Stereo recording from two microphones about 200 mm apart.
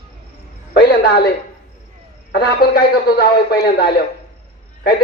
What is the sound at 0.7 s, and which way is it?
Music, 55° left (ahead or behind).